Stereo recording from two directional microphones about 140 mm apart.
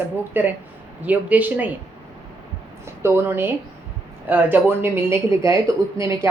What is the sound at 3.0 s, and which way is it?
A woman's voice, 15° right (ahead or behind).